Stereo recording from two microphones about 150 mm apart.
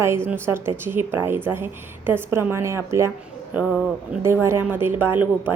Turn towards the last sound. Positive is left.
turn(degrees=-15)  # may be behind; listen again after turning